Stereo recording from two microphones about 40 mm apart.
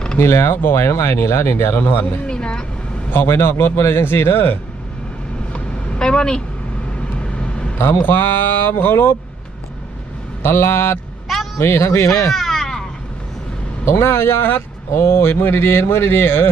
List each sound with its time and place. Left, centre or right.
0.2 s speech: left
2.2 s vehicle: left
3.1 s a man's voice: left
5.5 s vehicle: left
6.0 s speech: centre
6.9 s vehicle: left
8.0 s speech: left
10.4 s a man's voice: left
11.3 s a sound: centre
13.8 s speech: left